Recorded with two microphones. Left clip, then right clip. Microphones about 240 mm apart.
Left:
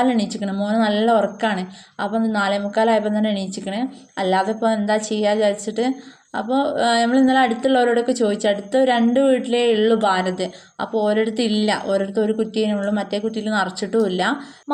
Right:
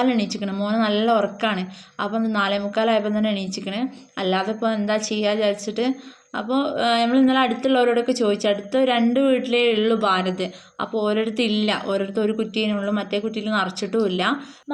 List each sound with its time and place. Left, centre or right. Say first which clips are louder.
0.0 s speech: left 2 dB; centre